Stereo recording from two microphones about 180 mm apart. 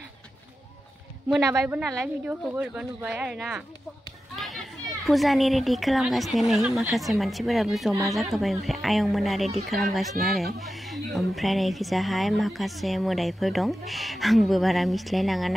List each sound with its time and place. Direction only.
1.4 s speech: 15° right (ahead or behind); by 15.5 s centre (ahead or behind)